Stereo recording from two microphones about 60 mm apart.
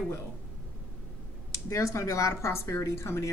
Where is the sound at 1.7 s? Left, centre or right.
Left.